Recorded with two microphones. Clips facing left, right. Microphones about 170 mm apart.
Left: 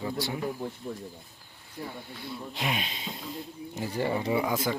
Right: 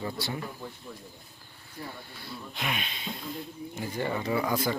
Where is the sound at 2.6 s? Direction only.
25° left (ahead or behind).